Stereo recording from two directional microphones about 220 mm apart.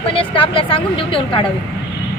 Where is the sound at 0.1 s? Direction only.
25° left (ahead or behind).